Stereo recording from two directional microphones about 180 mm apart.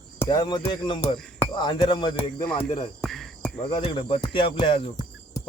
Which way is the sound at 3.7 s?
30° left (ahead or behind).